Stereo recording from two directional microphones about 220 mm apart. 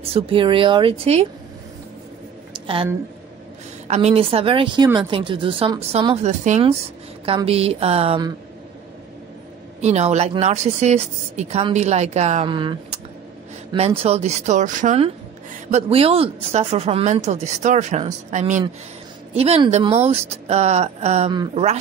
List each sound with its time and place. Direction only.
0.0 s a woman's voice: 25° right (ahead or behind)
2.6 s a woman's voice: 25° right (ahead or behind)
9.8 s a woman's voice: 30° right (ahead or behind)